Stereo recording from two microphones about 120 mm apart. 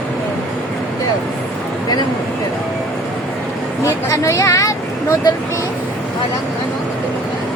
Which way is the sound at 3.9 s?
25° left (ahead or behind).